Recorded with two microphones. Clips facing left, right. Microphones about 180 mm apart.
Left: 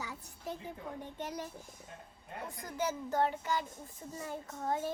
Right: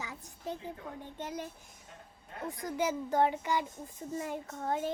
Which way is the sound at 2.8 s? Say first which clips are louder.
Right 3 dB; 15° right (ahead or behind).